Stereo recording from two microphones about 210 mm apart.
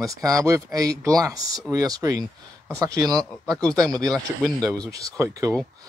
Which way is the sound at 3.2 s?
5° left (ahead or behind).